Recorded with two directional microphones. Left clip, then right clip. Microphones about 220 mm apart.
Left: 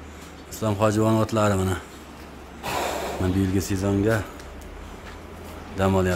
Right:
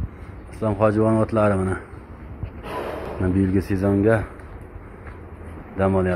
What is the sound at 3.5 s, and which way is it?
Speech, 10° right (ahead or behind).